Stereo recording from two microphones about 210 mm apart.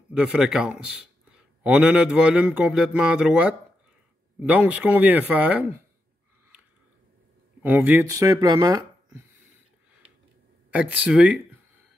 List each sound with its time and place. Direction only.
0.2 s a man's voice: centre (ahead or behind)
7.6 s speech: 10° right (ahead or behind)
10.7 s speech: 5° right (ahead or behind)